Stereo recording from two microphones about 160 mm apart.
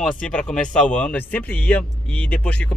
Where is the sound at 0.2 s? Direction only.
5° left (ahead or behind).